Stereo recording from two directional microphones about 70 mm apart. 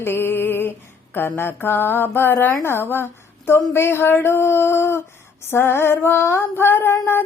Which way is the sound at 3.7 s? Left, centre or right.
Left.